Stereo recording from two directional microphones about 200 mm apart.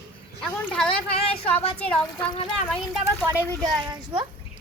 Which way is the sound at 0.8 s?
5° left (ahead or behind).